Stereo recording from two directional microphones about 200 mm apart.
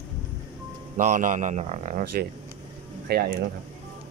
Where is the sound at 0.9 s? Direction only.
40° right (ahead or behind).